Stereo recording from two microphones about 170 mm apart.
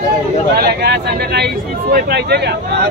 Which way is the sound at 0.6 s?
70° right (ahead or behind).